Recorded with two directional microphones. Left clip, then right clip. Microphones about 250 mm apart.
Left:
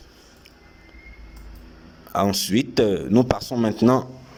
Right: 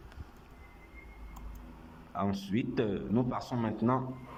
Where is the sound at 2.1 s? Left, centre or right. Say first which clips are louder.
Left 13 dB; left.